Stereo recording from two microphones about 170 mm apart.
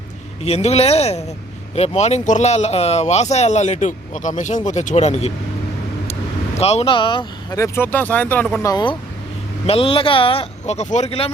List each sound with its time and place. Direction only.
0.4 s speech: 40° left (ahead or behind)
6.6 s speech: 35° left (ahead or behind)
7.6 s speech: 10° left (ahead or behind)
8.6 s speech: 25° left (ahead or behind)